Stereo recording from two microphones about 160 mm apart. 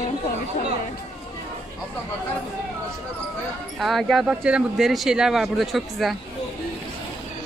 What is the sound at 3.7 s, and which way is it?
Speech, centre (ahead or behind).